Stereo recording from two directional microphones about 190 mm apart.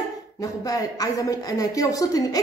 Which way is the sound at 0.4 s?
20° left (ahead or behind).